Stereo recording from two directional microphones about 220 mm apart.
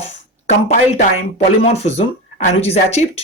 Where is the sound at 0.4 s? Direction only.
30° left (ahead or behind).